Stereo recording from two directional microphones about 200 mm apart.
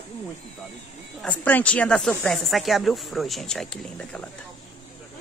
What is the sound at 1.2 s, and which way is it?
Speech, 5° left (ahead or behind).